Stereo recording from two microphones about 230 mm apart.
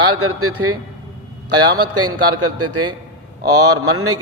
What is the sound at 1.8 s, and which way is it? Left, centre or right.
A man's voice, right.